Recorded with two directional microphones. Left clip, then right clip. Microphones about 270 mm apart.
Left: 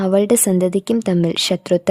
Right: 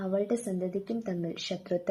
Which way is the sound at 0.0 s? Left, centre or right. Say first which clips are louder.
Left 15 dB; left.